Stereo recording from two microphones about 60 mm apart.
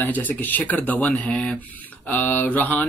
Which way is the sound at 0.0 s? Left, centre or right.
Left.